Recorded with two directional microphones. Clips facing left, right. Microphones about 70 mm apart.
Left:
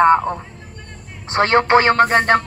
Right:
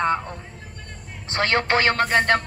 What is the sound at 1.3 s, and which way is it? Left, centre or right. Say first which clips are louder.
A woman's voice: left 7 dB; left.